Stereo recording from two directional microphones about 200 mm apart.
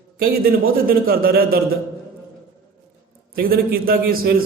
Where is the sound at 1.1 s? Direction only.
50° right (ahead or behind).